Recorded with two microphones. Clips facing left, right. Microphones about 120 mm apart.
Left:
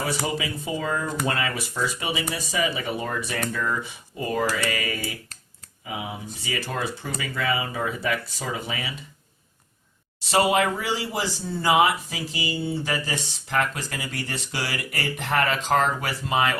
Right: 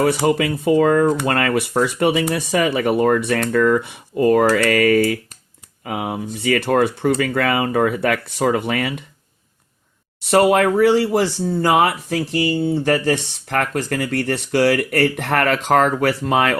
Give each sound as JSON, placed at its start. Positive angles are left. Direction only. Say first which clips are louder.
{"t": 0.0, "sound": "speech", "louder": "right 11 dB", "side_deg": -60}
{"t": 10.2, "sound": "speech", "louder": "right 7 dB", "side_deg": -55}